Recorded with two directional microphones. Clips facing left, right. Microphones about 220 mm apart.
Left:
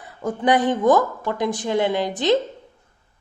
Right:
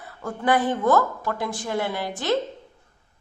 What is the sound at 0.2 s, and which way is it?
Speech, 20° left (ahead or behind).